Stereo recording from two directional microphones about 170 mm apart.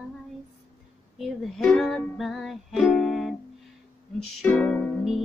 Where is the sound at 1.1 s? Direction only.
Centre (ahead or behind).